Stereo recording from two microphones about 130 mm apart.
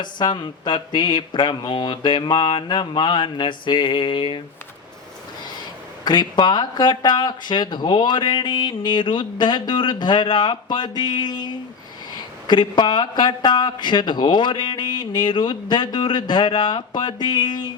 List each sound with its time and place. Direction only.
0.0 s speech: 35° left (ahead or behind)
6.1 s speech: 35° left (ahead or behind)